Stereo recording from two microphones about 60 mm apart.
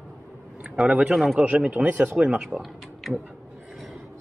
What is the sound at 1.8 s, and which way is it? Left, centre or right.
Speech, right.